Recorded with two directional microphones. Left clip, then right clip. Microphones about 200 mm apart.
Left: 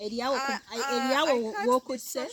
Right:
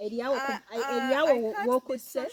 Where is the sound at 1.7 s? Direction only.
45° left (ahead or behind).